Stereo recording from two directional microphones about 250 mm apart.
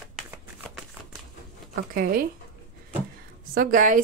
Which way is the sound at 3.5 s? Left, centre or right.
Right.